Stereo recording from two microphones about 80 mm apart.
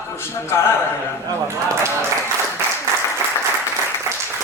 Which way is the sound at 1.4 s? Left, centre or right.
Right.